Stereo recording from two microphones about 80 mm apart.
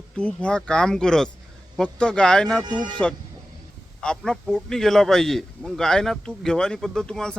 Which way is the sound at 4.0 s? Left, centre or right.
Centre.